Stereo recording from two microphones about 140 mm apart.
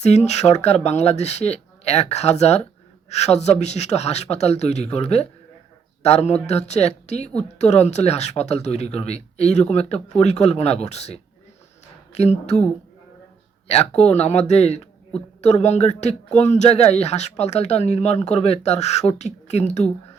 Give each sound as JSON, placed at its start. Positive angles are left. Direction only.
{"t": 0.0, "sound": "speech", "side_deg": 50}
{"t": 13.7, "sound": "speech", "side_deg": 50}